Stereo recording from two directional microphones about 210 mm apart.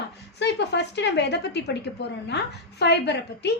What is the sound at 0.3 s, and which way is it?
Speech, 55° left (ahead or behind).